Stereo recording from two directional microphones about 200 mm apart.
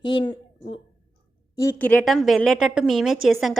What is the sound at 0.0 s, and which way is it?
Speech, 25° left (ahead or behind).